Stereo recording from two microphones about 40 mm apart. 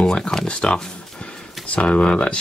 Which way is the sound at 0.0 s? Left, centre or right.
Left.